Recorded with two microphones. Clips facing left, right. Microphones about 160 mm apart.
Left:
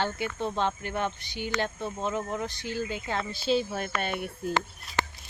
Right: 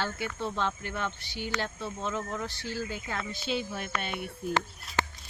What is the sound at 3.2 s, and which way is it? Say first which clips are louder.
Speech: left 7 dB; 35° left (ahead or behind).